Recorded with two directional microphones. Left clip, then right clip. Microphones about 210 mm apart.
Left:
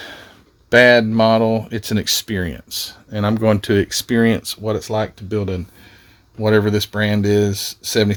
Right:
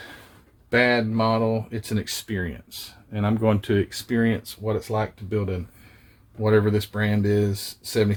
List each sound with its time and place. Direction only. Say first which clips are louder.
0.7 s speech: left 10 dB; 50° left (ahead or behind)